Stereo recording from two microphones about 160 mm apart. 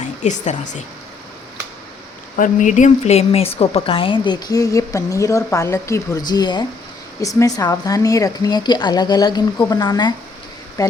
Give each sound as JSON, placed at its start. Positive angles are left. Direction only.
{"t": 0.2, "sound": "speech", "side_deg": 50}
{"t": 2.3, "sound": "speech", "side_deg": 55}